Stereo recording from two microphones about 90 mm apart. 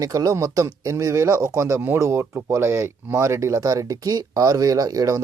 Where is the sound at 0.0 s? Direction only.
40° right (ahead or behind).